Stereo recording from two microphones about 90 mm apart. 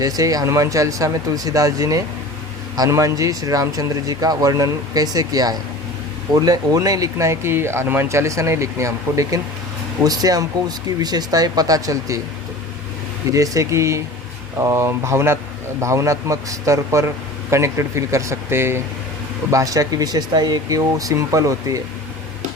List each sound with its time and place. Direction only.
0.0 s speech: 40° right (ahead or behind)
13.3 s speech: 40° right (ahead or behind)
19.5 s speech: 40° right (ahead or behind)